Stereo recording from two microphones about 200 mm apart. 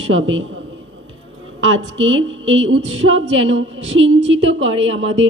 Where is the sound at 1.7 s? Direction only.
75° right (ahead or behind).